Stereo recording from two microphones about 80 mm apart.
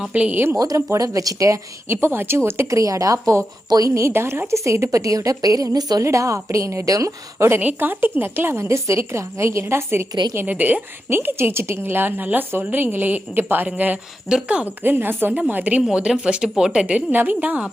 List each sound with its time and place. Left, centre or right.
0.1 s a woman's voice: centre
0.6 s a woman's voice: right
1.9 s a woman's voice: right
4.1 s a woman's voice: right
6.0 s a woman's voice: right
7.6 s a woman's voice: right
10.3 s a woman's voice: right
15.9 s a woman's voice: centre